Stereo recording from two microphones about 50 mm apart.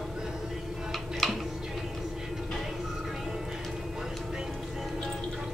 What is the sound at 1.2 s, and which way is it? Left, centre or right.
Tick-tock, centre.